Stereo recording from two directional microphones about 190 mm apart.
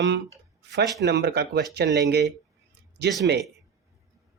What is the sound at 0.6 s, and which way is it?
Speech, 65° right (ahead or behind).